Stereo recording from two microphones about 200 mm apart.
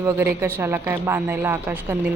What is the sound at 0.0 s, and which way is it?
Speech, 10° right (ahead or behind).